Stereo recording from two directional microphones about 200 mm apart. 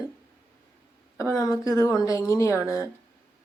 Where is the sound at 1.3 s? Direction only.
15° left (ahead or behind).